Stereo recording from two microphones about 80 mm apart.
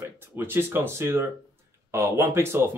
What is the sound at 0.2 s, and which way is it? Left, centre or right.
Speech, right.